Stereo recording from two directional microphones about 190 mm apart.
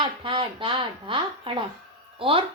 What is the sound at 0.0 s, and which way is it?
A woman's voice, 25° right (ahead or behind).